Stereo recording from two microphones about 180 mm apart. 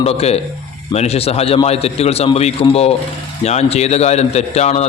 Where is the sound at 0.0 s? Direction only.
35° left (ahead or behind).